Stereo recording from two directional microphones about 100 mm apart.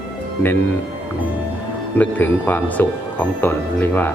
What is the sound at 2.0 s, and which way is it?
Speech, 20° left (ahead or behind).